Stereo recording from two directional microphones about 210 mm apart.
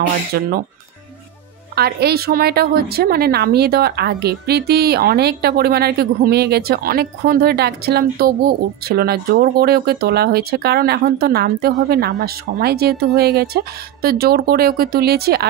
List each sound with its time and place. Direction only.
0.3 s a woman's voice: 45° right (ahead or behind)
1.8 s a woman's voice: 50° right (ahead or behind)